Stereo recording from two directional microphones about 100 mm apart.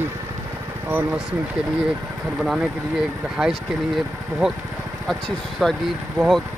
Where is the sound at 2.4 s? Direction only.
5° right (ahead or behind).